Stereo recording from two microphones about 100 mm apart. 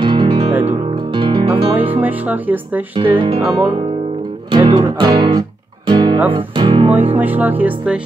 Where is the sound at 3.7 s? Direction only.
80° right.